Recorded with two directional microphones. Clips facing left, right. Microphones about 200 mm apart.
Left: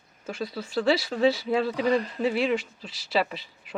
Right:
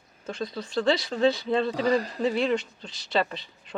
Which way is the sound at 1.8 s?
40° right (ahead or behind).